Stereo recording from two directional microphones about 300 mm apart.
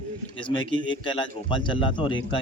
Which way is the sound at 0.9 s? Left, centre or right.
Centre.